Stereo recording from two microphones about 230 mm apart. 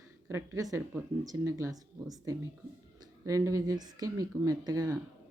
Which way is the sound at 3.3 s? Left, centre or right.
Centre.